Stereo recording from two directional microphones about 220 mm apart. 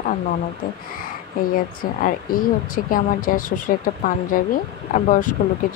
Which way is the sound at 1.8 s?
40° left (ahead or behind).